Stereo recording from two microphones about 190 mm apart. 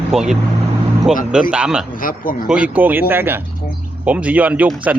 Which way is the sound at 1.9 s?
50° left (ahead or behind).